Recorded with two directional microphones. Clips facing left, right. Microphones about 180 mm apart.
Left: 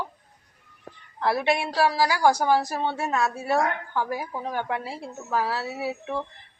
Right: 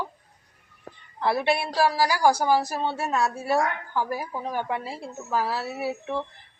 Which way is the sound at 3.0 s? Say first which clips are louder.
Right 1 dB; 5° right (ahead or behind).